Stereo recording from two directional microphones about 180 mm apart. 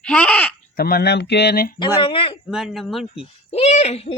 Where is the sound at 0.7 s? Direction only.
60° left (ahead or behind).